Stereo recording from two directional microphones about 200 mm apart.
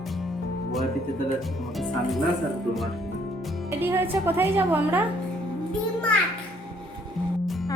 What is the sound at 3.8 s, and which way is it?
A woman's voice, 10° right (ahead or behind).